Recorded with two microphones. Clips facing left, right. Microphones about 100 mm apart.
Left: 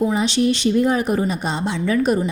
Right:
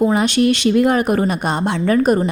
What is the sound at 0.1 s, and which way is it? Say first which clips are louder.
A woman's voice: right 3 dB; 60° right (ahead or behind).